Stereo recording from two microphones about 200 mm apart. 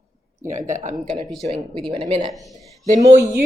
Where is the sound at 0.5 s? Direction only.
40° right (ahead or behind).